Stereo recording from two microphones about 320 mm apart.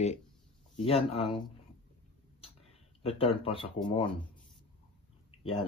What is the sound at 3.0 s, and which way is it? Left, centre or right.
Speech, centre.